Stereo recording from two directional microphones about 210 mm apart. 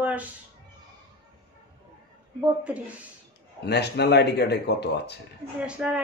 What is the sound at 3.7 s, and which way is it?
Speech, 50° left (ahead or behind).